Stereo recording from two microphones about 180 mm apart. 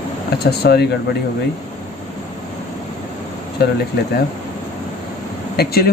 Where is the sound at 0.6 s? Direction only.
60° left (ahead or behind).